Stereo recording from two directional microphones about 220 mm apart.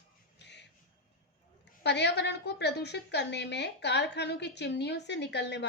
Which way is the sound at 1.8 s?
50° left (ahead or behind).